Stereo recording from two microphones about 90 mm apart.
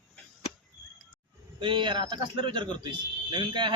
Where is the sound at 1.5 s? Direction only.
65° right (ahead or behind).